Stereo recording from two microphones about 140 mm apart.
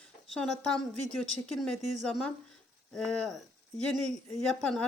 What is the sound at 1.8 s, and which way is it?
Speech, 60° right (ahead or behind).